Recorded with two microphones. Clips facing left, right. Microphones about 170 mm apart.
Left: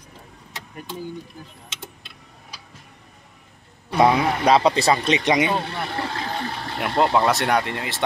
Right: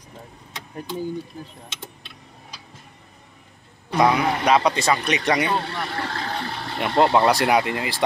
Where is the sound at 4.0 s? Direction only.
30° left (ahead or behind); by 6.1 s 10° left (ahead or behind).